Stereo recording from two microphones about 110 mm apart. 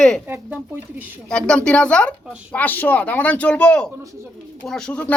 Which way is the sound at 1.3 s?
10° left (ahead or behind).